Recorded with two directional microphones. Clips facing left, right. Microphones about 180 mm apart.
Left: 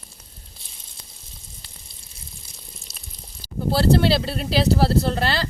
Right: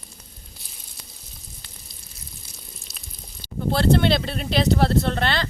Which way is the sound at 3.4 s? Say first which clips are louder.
Even; 40° left (ahead or behind).